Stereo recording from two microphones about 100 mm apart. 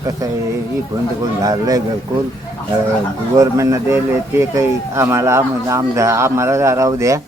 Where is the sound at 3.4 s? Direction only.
30° right (ahead or behind).